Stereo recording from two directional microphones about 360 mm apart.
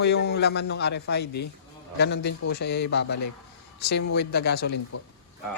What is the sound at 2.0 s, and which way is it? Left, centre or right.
Speech, left.